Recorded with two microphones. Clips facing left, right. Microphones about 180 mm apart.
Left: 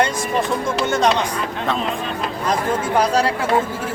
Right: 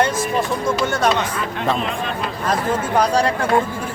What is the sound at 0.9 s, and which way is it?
Speech, 20° left (ahead or behind).